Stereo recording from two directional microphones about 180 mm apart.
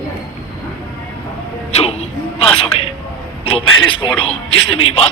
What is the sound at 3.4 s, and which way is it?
Speech, 30° left (ahead or behind).